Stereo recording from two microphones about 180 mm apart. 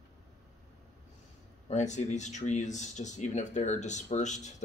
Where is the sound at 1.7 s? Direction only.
40° left (ahead or behind).